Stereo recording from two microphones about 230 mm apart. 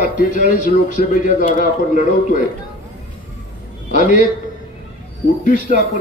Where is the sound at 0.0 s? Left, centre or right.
Left.